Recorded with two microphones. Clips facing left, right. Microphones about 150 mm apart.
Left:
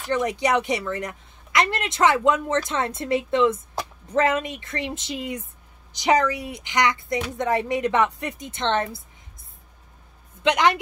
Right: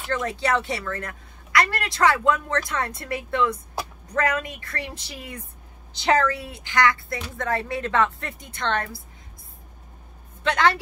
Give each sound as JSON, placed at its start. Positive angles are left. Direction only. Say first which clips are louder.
{"t": 0.1, "sound": "a woman's voice", "louder": "left 3 dB", "side_deg": 15}
{"t": 10.4, "sound": "a woman's voice", "louder": "left 2 dB", "side_deg": 20}